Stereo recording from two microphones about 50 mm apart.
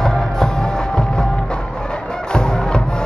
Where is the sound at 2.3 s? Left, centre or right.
Centre.